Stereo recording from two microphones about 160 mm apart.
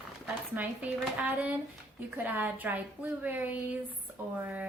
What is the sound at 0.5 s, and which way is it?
A woman's voice, 10° right (ahead or behind).